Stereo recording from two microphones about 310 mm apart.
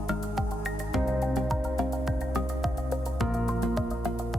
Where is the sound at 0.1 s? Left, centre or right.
Centre.